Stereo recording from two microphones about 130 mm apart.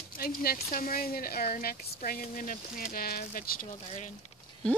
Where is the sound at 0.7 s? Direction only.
90° left.